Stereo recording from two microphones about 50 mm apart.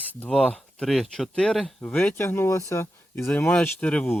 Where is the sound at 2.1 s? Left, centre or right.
Left.